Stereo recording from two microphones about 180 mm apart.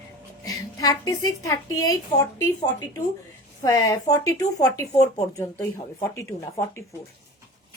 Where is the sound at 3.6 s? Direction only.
20° left (ahead or behind).